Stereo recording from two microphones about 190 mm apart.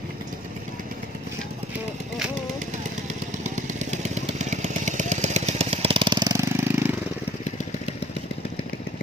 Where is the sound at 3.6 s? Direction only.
40° right (ahead or behind); by 6.9 s 10° right (ahead or behind).